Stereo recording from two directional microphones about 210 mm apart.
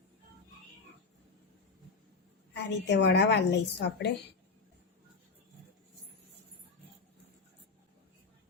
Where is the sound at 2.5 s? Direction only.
55° left (ahead or behind).